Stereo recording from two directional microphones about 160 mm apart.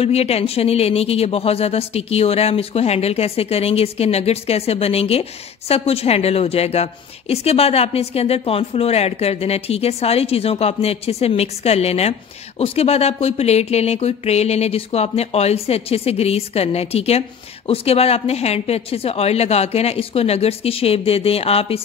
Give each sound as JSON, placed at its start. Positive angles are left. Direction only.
{"t": 0.0, "sound": "a woman's voice", "side_deg": 40}